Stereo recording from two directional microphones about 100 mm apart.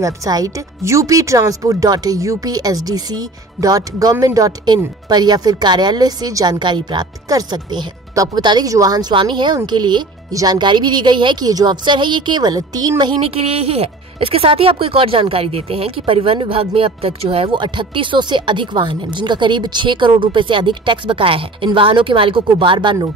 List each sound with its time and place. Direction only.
0.0 s speech: 35° right (ahead or behind)
6.6 s a woman's voice: 50° right (ahead or behind)
9.1 s a woman's voice: 55° right (ahead or behind)
13.2 s speech: 75° right (ahead or behind); by 22.9 s 55° right (ahead or behind)